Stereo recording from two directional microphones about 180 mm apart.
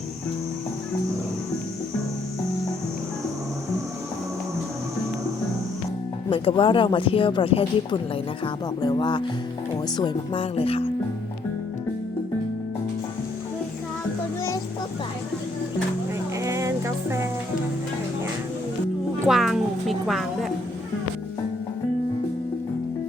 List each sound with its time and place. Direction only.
6.3 s speech: 30° left (ahead or behind)
16.4 s music: 15° right (ahead or behind)
19.3 s a woman's voice: centre (ahead or behind)